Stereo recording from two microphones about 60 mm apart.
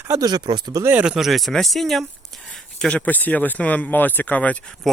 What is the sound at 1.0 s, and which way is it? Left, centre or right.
Speech, centre.